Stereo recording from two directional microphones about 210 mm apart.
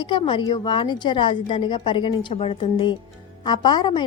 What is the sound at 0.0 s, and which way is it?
A woman's voice, 20° left (ahead or behind).